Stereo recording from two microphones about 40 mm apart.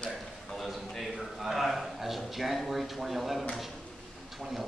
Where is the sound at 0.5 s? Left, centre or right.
Centre.